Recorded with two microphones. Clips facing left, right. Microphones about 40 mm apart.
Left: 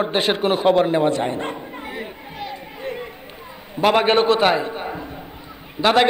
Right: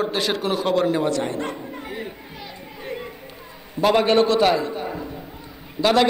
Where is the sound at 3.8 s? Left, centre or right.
Left.